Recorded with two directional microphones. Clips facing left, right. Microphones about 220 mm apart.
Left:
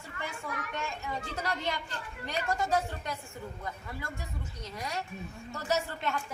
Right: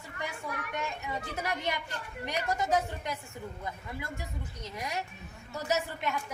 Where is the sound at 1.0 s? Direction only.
15° right (ahead or behind).